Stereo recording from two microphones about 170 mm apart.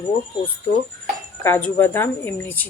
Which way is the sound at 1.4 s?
15° left (ahead or behind).